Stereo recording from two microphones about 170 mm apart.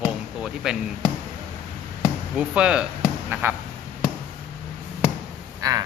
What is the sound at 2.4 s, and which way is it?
Speech, 5° right (ahead or behind).